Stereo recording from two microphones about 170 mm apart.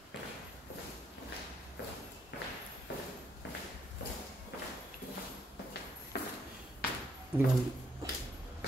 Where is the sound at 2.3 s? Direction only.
75° left (ahead or behind).